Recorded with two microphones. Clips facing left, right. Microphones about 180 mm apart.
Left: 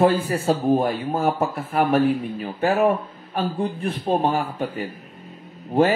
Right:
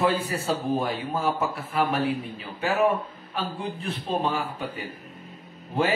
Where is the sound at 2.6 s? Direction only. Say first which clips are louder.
Left 4 dB; 55° left (ahead or behind).